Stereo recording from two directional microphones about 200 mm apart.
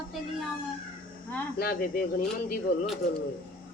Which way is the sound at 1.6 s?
45° left (ahead or behind).